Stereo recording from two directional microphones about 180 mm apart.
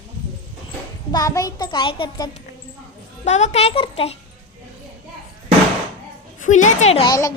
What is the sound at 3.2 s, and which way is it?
Speech, 40° left (ahead or behind).